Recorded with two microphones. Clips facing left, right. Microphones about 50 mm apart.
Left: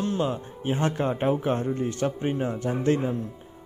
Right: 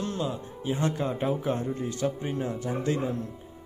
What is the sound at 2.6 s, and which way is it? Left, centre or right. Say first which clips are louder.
Speech: left 6 dB; left.